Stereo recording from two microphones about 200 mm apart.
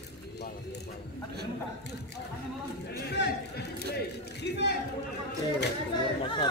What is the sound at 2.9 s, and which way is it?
Speech, 55° left (ahead or behind).